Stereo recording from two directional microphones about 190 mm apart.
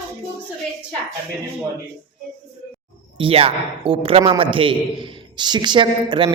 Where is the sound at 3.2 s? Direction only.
30° right (ahead or behind).